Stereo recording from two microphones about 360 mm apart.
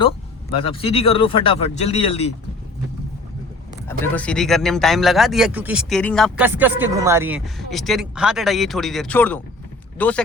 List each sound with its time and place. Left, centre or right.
0.6 s speech: centre
3.8 s a man's voice: centre